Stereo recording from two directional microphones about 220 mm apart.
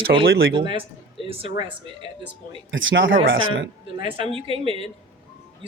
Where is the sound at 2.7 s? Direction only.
60° right (ahead or behind).